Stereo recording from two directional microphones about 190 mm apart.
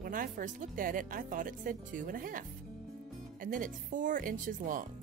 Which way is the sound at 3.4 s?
45° right (ahead or behind).